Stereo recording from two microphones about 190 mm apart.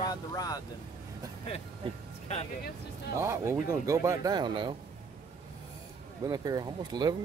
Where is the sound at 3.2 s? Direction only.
15° right (ahead or behind).